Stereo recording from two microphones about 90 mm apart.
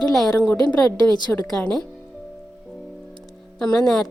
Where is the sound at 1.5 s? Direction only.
5° left (ahead or behind).